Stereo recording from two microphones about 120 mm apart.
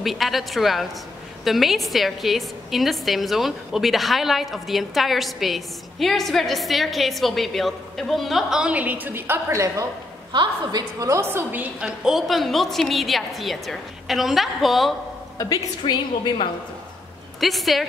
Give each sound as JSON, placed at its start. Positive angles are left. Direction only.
{"t": 0.0, "sound": "a woman's voice", "side_deg": 0}
{"t": 10.3, "sound": "a woman's voice", "side_deg": -35}
{"t": 15.3, "sound": "a woman's voice", "side_deg": 35}
{"t": 17.4, "sound": "a woman's voice", "side_deg": 0}